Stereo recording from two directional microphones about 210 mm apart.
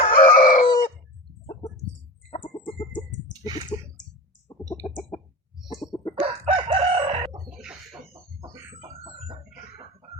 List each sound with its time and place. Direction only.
0.1 s chicken: 45° left (ahead or behind)
2.3 s chicken: 25° left (ahead or behind)
3.4 s a sound: 20° right (ahead or behind)
5.7 s chicken: 20° left (ahead or behind)
6.1 s chicken: 25° right (ahead or behind)